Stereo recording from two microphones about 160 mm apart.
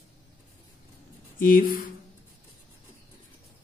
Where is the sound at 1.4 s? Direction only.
60° left (ahead or behind).